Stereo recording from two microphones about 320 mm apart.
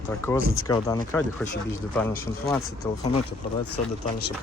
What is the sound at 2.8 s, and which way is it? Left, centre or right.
Speech, centre.